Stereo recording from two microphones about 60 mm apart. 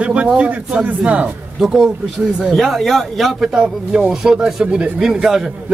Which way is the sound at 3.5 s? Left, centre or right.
Centre.